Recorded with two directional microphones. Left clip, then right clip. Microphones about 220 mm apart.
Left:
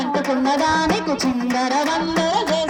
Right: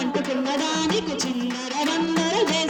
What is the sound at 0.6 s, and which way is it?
Music, 10° right (ahead or behind).